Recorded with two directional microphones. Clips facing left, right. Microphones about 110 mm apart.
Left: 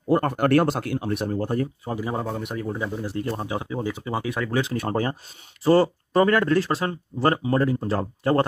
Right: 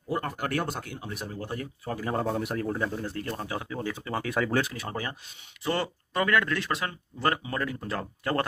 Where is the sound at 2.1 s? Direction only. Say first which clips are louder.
Even; centre (ahead or behind).